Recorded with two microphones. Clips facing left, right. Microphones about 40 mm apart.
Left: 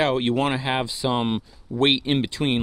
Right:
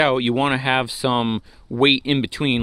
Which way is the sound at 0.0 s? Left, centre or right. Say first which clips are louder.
Right 3 dB; right.